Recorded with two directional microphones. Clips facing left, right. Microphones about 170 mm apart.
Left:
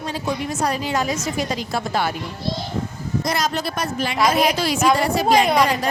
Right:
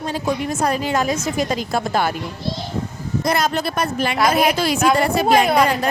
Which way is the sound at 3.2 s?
55° right (ahead or behind).